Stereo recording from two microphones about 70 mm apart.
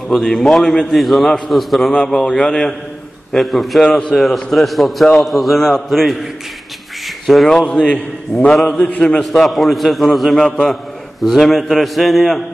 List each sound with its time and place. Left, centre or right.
0.1 s a man's voice: centre
7.2 s a man's voice: centre; by 9.0 s left
9.2 s a man's voice: centre